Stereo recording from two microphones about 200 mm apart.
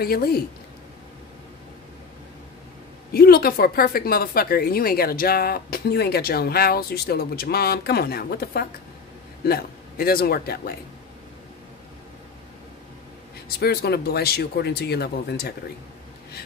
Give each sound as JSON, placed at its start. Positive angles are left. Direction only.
{"t": 0.0, "sound": "speech", "side_deg": 50}
{"t": 3.1, "sound": "a man's voice", "side_deg": 50}
{"t": 13.6, "sound": "speech", "side_deg": 50}